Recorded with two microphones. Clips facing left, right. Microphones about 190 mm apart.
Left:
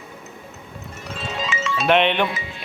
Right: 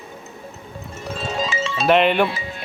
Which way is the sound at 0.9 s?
40° right (ahead or behind).